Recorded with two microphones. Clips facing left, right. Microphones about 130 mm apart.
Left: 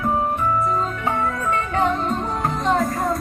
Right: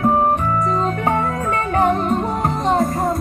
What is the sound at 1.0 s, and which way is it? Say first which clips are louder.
Music: right 3 dB; 40° right (ahead or behind).